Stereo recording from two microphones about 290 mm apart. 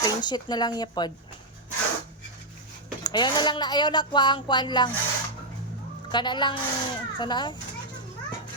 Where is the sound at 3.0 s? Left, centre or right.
Centre.